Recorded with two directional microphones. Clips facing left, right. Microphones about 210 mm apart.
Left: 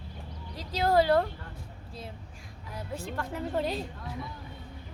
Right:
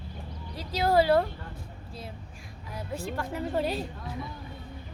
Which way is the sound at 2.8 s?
10° right (ahead or behind).